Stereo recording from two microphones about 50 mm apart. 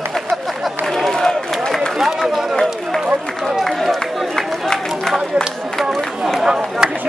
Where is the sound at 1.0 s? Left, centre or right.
Centre.